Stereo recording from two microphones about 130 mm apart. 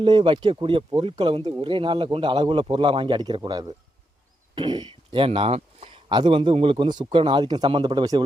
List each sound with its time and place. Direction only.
0.0 s speech: 40° right (ahead or behind)